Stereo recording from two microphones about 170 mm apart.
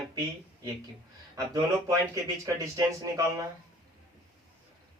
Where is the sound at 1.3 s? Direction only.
20° right (ahead or behind).